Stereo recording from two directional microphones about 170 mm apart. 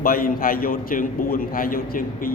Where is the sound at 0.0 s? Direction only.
55° left (ahead or behind).